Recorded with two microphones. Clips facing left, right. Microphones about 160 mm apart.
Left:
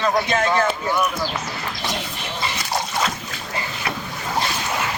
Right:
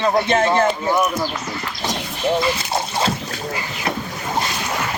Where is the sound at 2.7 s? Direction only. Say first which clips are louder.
Right 3 dB; 30° right (ahead or behind).